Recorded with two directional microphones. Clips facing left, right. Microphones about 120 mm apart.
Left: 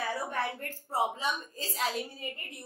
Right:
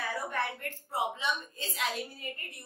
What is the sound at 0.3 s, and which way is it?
A woman's voice, 35° left (ahead or behind).